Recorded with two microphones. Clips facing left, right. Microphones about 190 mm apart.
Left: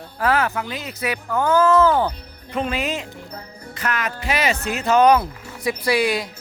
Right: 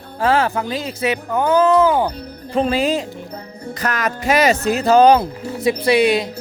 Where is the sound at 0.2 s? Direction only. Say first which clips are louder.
Right 4 dB; 30° right (ahead or behind).